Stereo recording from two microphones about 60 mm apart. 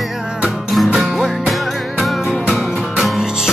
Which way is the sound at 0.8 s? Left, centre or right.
Centre.